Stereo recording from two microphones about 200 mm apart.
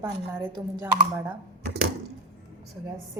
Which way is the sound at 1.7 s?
55° right (ahead or behind).